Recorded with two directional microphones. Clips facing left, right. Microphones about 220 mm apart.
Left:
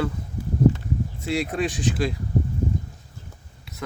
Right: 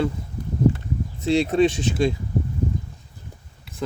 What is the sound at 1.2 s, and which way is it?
Speech, 25° right (ahead or behind).